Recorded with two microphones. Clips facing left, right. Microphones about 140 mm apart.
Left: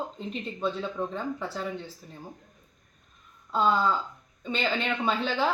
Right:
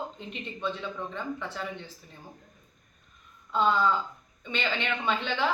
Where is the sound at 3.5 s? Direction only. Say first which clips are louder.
Even; 35° left (ahead or behind).